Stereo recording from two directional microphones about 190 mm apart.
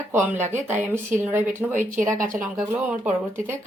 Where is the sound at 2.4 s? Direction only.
10° right (ahead or behind).